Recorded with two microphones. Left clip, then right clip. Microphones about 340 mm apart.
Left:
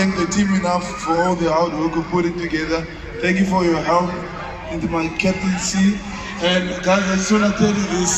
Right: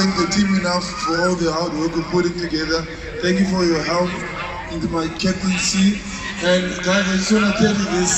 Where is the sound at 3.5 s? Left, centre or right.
Centre.